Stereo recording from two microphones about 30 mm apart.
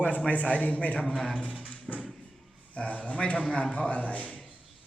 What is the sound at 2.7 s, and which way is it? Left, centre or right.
A man's voice, left.